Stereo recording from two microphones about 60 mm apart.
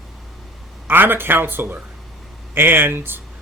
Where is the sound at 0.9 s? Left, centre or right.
Right.